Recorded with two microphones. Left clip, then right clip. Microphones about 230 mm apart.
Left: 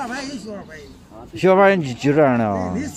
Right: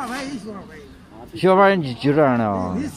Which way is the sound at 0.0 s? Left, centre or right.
Centre.